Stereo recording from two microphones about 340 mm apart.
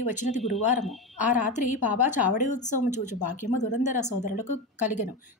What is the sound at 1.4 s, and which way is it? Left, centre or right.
A woman's voice, left.